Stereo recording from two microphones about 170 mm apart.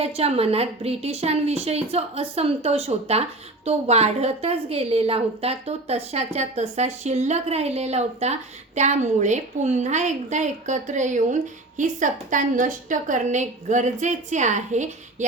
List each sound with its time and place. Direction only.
0.0 s a woman's voice: 35° right (ahead or behind)